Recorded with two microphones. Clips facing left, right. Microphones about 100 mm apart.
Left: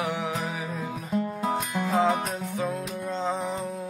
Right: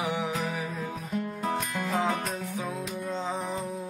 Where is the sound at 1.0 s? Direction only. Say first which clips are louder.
Left 4 dB; 10° left (ahead or behind).